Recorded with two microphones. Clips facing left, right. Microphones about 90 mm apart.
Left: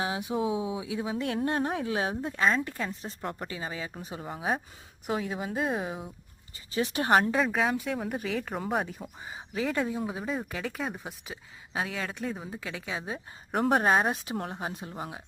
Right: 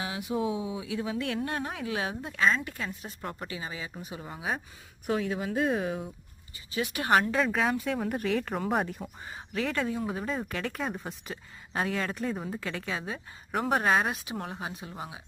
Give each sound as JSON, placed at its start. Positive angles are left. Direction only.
{"t": 0.0, "sound": "speech", "side_deg": 25}
{"t": 0.3, "sound": "speech", "side_deg": 10}
{"t": 1.1, "sound": "speech", "side_deg": 30}
{"t": 5.0, "sound": "speech", "side_deg": 10}
{"t": 6.7, "sound": "speech", "side_deg": 35}
{"t": 7.3, "sound": "speech", "side_deg": 5}
{"t": 9.3, "sound": "speech", "side_deg": 10}
{"t": 13.5, "sound": "speech", "side_deg": 40}